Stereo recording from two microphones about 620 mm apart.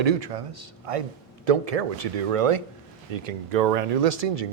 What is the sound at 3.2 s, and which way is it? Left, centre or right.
Speech, right.